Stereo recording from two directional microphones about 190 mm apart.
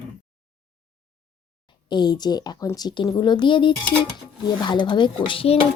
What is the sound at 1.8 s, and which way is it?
Speech, 25° left (ahead or behind).